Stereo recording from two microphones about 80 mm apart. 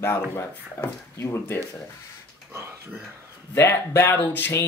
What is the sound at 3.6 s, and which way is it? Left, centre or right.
Speech, left.